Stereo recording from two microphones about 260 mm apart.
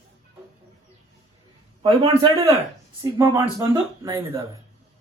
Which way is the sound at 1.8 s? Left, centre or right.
Centre.